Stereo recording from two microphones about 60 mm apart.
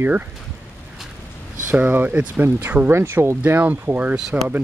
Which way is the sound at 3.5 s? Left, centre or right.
Right.